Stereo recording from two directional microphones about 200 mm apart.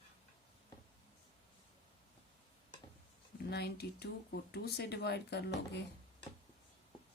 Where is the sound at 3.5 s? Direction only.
55° left (ahead or behind).